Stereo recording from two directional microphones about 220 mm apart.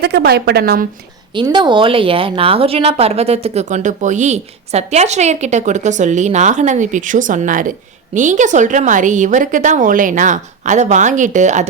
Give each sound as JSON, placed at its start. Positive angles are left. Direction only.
{"t": 0.0, "sound": "a woman's voice", "side_deg": -45}
{"t": 1.3, "sound": "a woman's voice", "side_deg": -20}